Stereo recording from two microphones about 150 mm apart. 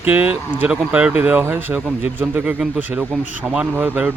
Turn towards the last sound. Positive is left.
turn(degrees=-10)  # may be behind; listen again after turning